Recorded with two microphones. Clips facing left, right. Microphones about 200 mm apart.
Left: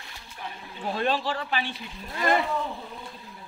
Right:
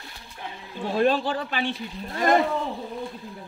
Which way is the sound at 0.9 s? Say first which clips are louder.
Right 6 dB; 50° right (ahead or behind).